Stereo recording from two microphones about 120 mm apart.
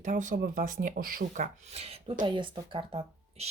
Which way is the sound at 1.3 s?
75° right (ahead or behind).